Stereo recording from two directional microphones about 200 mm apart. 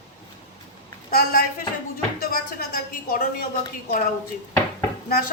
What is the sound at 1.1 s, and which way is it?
Speech, 45° left (ahead or behind).